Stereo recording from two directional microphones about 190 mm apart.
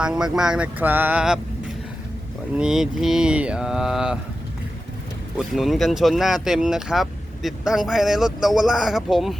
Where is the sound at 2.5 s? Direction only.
5° right (ahead or behind).